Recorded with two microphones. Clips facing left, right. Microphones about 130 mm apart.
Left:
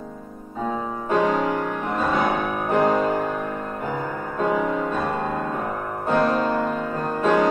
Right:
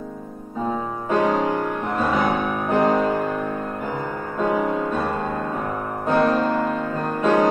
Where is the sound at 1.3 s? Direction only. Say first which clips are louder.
Right 1 dB; 40° right (ahead or behind).